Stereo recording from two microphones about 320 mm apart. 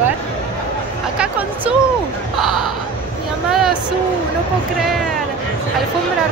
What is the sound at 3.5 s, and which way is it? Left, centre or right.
Vehicle, centre.